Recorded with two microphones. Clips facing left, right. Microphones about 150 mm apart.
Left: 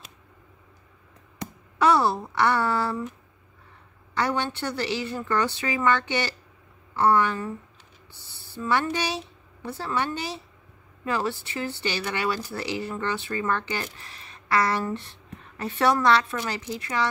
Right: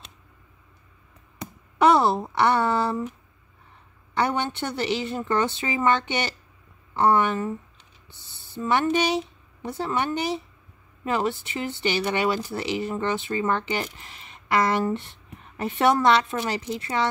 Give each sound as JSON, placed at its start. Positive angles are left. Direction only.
{"t": 1.8, "sound": "speech", "side_deg": -20}
{"t": 4.2, "sound": "a woman's voice", "side_deg": -20}